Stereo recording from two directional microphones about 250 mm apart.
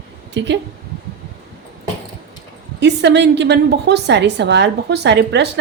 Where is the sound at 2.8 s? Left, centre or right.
Right.